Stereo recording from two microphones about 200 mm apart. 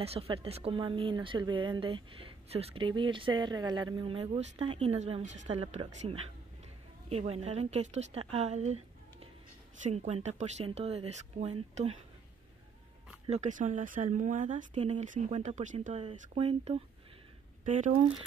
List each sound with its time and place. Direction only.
0.0 s speech: 30° right (ahead or behind)
9.8 s speech: 35° right (ahead or behind)
13.3 s speech: 35° right (ahead or behind)